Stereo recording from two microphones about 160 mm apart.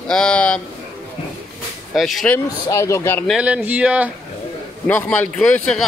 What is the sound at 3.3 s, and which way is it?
Speech, 10° right (ahead or behind).